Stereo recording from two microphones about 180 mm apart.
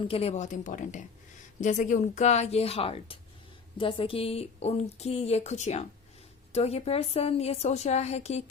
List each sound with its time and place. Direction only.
0.1 s a woman's voice: 35° left (ahead or behind)